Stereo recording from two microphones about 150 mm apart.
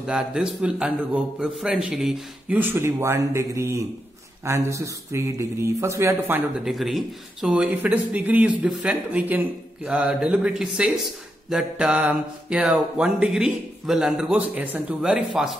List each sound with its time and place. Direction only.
0.0 s a man's voice: 5° right (ahead or behind)
2.5 s a man's voice: 15° right (ahead or behind)
6.6 s a man's voice: centre (ahead or behind)